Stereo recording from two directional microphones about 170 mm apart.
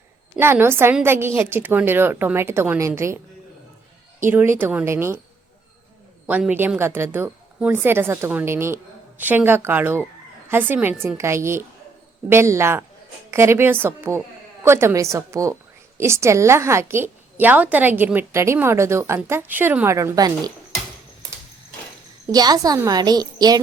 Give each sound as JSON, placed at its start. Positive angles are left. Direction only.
{"t": 0.3, "sound": "a woman's voice", "side_deg": -15}
{"t": 4.3, "sound": "a woman's voice", "side_deg": -10}
{"t": 6.2, "sound": "a woman's voice", "side_deg": -10}
{"t": 22.3, "sound": "a woman's voice", "side_deg": -25}